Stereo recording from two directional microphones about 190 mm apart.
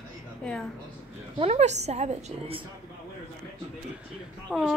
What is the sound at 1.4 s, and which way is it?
A woman's voice, 35° right (ahead or behind).